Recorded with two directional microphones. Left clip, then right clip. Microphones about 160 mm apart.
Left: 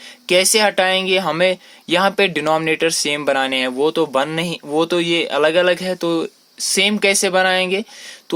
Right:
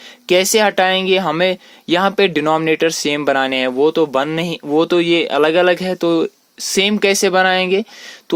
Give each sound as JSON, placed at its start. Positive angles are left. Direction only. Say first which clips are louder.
{"t": 0.3, "sound": "speech", "louder": "right 1 dB", "side_deg": -45}